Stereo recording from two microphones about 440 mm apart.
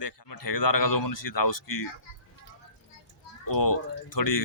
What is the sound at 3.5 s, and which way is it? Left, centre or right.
Speech, left.